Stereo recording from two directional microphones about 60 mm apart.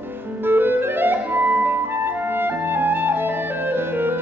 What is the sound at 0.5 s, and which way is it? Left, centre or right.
Clarinet, right.